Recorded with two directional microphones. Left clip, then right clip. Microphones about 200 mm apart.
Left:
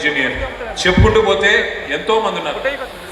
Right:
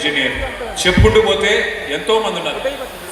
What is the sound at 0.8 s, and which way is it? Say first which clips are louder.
A man's voice: right 1 dB; 50° right (ahead or behind).